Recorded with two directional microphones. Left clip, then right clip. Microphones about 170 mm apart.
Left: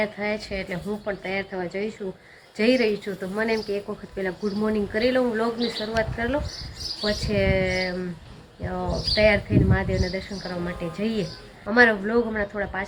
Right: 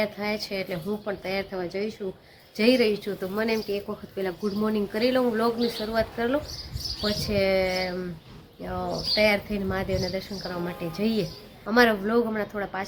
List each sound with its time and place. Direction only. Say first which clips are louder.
0.0 s speech: left 2 dB; 15° right (ahead or behind)